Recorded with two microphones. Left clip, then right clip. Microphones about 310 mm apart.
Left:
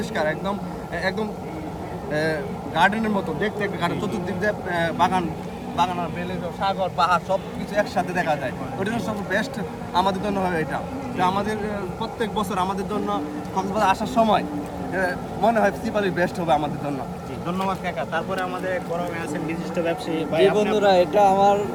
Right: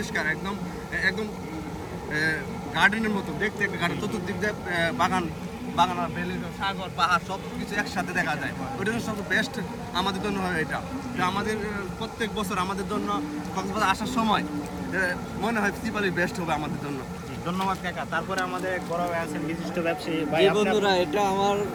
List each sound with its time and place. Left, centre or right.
0.1 s a man's voice: centre
2.1 s a man's voice: centre
6.6 s a man's voice: centre
20.7 s a man's voice: centre